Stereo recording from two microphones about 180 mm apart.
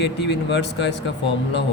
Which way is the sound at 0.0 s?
75° left (ahead or behind).